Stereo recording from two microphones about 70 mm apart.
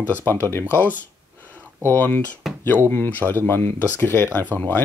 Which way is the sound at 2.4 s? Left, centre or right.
Centre.